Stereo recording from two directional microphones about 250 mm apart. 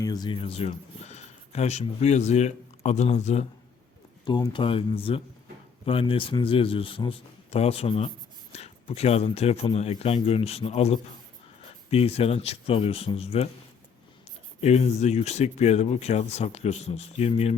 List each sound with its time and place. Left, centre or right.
0.0 s speech: centre
14.6 s speech: left